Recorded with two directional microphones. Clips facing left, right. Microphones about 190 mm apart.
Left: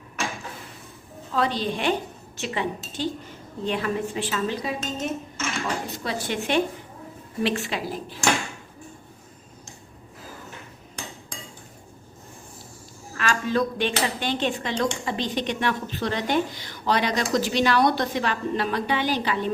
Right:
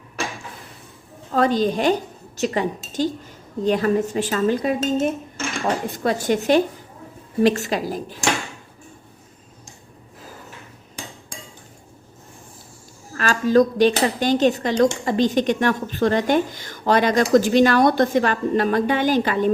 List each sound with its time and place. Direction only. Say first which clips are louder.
1.3 s speech: right 6 dB; 45° right (ahead or behind)
13.1 s speech: right 8 dB; 40° right (ahead or behind)